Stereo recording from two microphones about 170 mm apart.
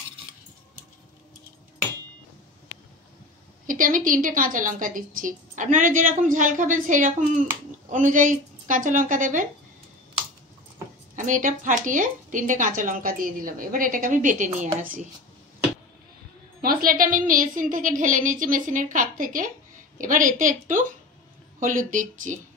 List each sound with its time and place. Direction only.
3.6 s a woman's voice: 50° right (ahead or behind)
11.1 s a woman's voice: 50° right (ahead or behind)
16.6 s a woman's voice: 55° right (ahead or behind)
21.5 s a woman's voice: 50° right (ahead or behind)